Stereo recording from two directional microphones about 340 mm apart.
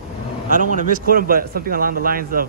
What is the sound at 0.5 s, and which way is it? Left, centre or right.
Speech, right.